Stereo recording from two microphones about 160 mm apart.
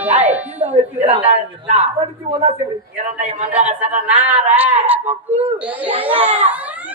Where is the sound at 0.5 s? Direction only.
40° right (ahead or behind).